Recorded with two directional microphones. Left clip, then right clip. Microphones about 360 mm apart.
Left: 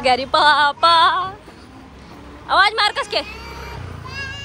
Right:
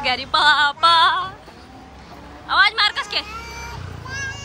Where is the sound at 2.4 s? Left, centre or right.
Centre.